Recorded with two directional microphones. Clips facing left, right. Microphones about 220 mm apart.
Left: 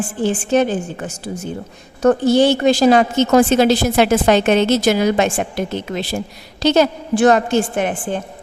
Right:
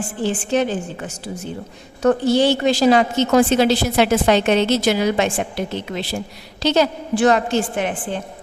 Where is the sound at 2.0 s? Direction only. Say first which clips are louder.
Left 3 dB; 45° left (ahead or behind).